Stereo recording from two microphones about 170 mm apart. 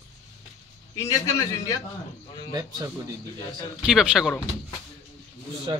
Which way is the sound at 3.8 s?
5° right (ahead or behind).